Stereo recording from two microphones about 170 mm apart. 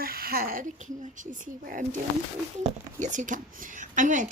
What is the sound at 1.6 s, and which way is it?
A woman's voice, 50° right (ahead or behind).